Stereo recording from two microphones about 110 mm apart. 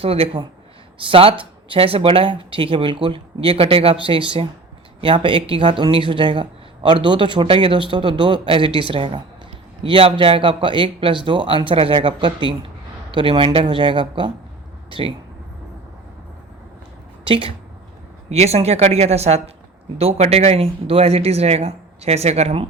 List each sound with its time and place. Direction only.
0.0 s a man's voice: 60° right (ahead or behind)
17.2 s a woman's voice: 55° right (ahead or behind)
18.3 s speech: 75° right (ahead or behind)